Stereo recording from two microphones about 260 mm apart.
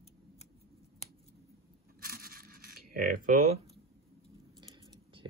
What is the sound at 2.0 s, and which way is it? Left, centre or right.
Coin, right.